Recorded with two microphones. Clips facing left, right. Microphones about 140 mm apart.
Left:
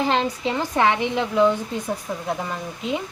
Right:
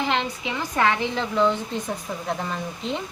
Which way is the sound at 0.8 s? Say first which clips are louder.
Left 2 dB; 15° left (ahead or behind).